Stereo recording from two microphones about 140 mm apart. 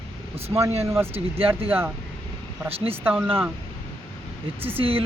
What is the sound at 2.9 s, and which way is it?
Speech, 15° right (ahead or behind).